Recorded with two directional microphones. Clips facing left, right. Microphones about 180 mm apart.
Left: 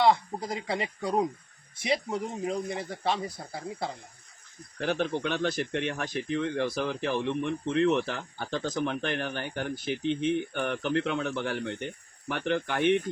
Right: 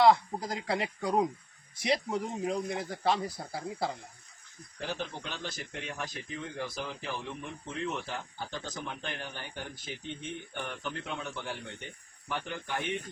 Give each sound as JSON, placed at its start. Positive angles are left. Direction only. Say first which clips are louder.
{"t": 0.0, "sound": "speech", "louder": "right 1 dB", "side_deg": 0}
{"t": 4.8, "sound": "speech", "louder": "left 9 dB", "side_deg": 65}